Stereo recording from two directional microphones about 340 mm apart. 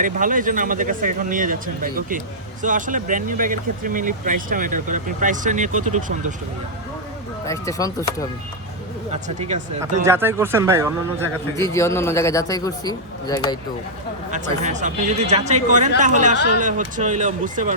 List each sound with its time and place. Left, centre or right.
0.0 s speech: right
7.4 s a man's voice: centre
9.4 s speech: centre
10.0 s speech: centre
11.5 s a man's voice: centre
14.3 s speech: right